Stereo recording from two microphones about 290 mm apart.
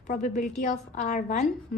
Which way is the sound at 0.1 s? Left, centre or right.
Left.